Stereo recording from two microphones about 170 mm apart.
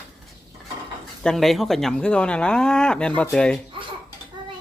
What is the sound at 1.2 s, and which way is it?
Speech, centre (ahead or behind).